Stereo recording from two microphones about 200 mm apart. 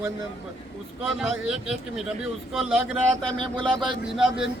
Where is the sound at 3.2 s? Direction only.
25° right (ahead or behind).